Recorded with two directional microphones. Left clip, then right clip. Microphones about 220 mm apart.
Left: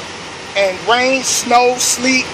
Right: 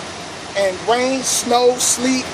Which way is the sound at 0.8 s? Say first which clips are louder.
Left 4 dB; 10° left (ahead or behind).